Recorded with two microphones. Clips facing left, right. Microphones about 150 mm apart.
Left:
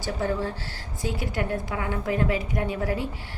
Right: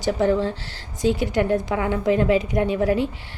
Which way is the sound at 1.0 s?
20° right (ahead or behind).